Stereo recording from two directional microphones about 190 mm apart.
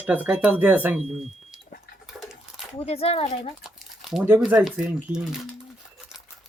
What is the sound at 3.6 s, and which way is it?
Speech, centre (ahead or behind).